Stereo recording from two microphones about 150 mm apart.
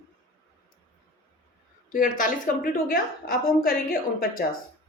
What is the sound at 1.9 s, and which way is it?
A woman's voice, 65° left (ahead or behind).